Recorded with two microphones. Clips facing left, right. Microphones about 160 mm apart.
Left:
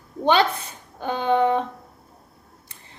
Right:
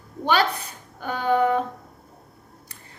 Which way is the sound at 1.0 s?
25° left (ahead or behind).